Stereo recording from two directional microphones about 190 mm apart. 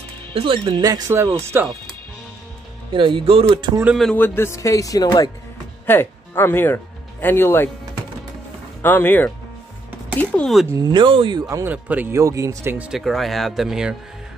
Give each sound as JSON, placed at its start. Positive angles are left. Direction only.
{"t": 0.3, "sound": "speech", "side_deg": -30}
{"t": 2.9, "sound": "speech", "side_deg": -25}
{"t": 3.8, "sound": "a man's voice", "side_deg": 0}
{"t": 8.8, "sound": "a man's voice", "side_deg": 10}
{"t": 10.7, "sound": "speech", "side_deg": -20}